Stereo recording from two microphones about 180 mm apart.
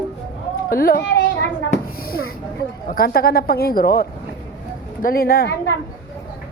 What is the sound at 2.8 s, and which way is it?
A woman's voice, 55° left (ahead or behind).